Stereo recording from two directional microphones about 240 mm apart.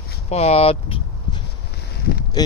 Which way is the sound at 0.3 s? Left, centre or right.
Left.